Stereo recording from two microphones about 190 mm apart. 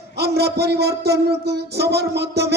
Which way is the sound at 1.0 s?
60° right (ahead or behind).